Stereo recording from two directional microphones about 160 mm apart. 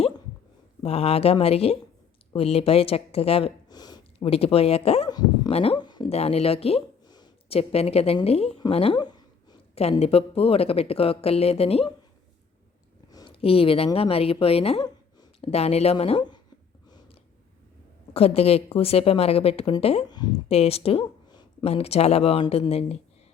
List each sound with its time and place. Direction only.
0.8 s speech: 40° left (ahead or behind)
3.7 s a sound: 25° left (ahead or behind)
4.3 s speech: 35° left (ahead or behind)
6.1 s a woman's voice: 40° left (ahead or behind)
10.0 s speech: 40° left (ahead or behind)
13.1 s a woman's voice: 25° left (ahead or behind)
18.1 s speech: 40° left (ahead or behind)
20.5 s speech: 40° left (ahead or behind)